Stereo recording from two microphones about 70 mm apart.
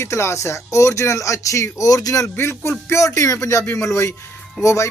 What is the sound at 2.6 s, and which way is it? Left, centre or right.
Speech, left.